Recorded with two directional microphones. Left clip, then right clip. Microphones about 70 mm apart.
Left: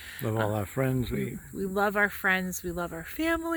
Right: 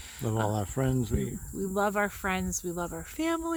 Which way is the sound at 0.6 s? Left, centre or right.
Right.